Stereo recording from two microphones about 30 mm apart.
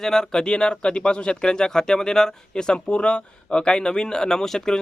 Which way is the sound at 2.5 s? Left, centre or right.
Left.